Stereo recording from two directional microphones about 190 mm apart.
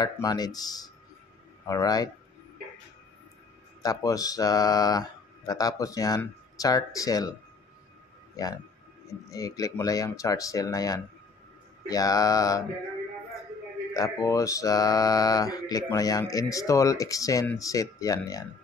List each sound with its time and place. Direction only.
0.0 s speech: 20° left (ahead or behind)
3.8 s speech: 20° left (ahead or behind)
9.3 s speech: 15° left (ahead or behind)
13.9 s speech: 20° left (ahead or behind)